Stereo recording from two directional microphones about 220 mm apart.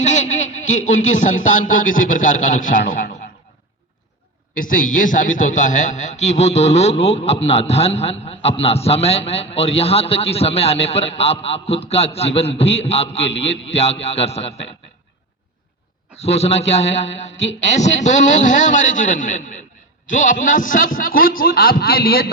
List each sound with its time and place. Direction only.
0.0 s speech: 35° left (ahead or behind)
4.5 s a man's voice: 40° left (ahead or behind)
16.1 s a man's voice: 30° left (ahead or behind)